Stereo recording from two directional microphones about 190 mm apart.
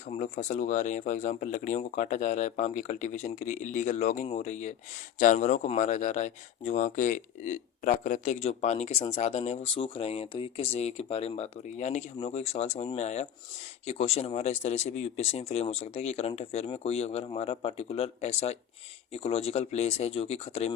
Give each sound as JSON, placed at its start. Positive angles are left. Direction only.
{"t": 0.1, "sound": "speech", "side_deg": 40}